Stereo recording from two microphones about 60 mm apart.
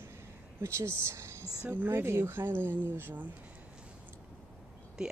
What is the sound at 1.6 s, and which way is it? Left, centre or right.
A woman's voice, right.